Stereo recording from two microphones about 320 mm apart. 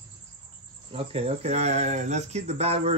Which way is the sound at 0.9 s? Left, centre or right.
Centre.